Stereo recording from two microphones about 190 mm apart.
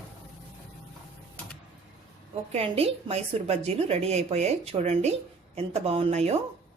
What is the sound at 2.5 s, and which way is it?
A woman's voice, 30° right (ahead or behind).